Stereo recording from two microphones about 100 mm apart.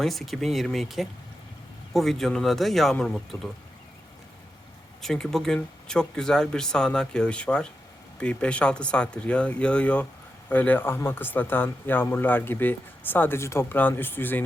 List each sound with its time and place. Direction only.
0.0 s speech: centre (ahead or behind)
5.0 s speech: 5° left (ahead or behind); by 14.4 s 20° left (ahead or behind)